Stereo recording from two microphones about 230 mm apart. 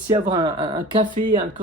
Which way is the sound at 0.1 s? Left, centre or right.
Centre.